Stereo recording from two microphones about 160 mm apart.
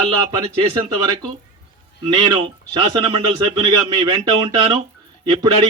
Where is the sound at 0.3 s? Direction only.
25° right (ahead or behind).